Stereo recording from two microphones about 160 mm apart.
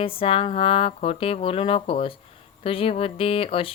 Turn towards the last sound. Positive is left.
turn(degrees=35)  # may be behind; listen again after turning